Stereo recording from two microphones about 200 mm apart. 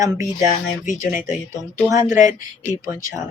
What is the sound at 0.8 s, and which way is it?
Speech, 40° left (ahead or behind).